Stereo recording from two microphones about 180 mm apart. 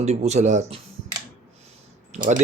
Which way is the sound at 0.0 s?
35° right (ahead or behind).